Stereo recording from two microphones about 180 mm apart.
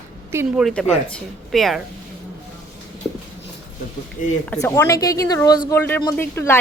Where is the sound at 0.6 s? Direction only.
5° left (ahead or behind).